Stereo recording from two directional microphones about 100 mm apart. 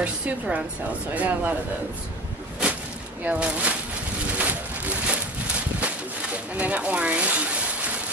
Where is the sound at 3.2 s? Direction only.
15° right (ahead or behind).